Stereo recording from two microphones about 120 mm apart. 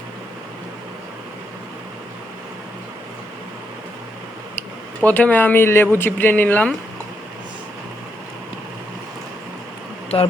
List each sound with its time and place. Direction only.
4.9 s speech: 15° left (ahead or behind)